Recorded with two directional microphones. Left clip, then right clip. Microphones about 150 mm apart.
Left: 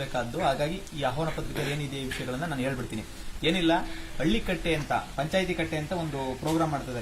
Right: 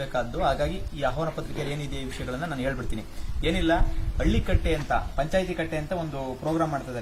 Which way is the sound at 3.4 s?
45° right (ahead or behind).